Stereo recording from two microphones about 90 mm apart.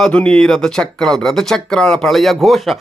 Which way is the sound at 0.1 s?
10° left (ahead or behind).